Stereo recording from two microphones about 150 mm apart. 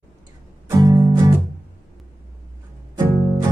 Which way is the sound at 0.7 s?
25° right (ahead or behind).